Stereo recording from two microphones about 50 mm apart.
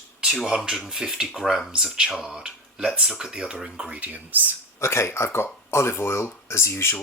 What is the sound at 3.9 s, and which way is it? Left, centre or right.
Speech, right.